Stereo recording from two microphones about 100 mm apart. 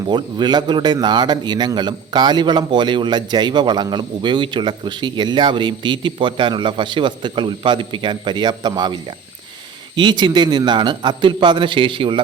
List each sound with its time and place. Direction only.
0.0 s speech: 45° right (ahead or behind)